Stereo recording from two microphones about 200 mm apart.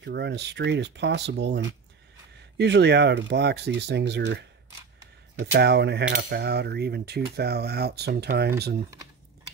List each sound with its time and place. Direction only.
0.0 s speech: 60° right (ahead or behind)